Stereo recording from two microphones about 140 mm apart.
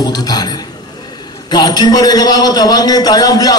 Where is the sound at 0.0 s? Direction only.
30° left (ahead or behind).